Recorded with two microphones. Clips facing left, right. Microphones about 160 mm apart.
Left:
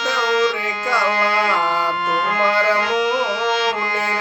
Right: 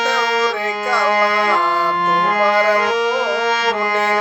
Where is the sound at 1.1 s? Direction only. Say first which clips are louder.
Right 5 dB; 40° right (ahead or behind).